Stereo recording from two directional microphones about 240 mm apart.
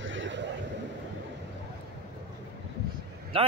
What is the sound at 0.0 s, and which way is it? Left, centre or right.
Vehicle, right.